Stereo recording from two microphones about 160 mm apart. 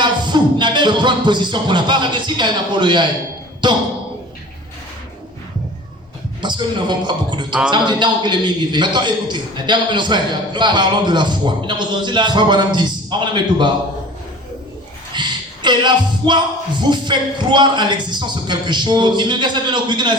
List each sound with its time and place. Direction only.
0.0 s music: 30° right (ahead or behind)
3.6 s a man's voice: 30° right (ahead or behind)
6.4 s a man's voice: 30° right (ahead or behind)
15.1 s music: 30° right (ahead or behind)
16.8 s a man's voice: 30° right (ahead or behind)